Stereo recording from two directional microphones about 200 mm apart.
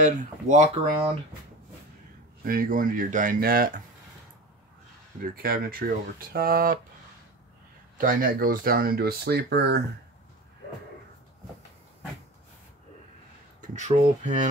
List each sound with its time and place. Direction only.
0.0 s speech: 40° right (ahead or behind)
2.4 s speech: 45° right (ahead or behind)
5.2 s speech: 45° right (ahead or behind)
8.0 s speech: 45° right (ahead or behind)
13.6 s speech: 35° right (ahead or behind)